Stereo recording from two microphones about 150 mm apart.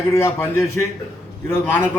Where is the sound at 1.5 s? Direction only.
15° left (ahead or behind).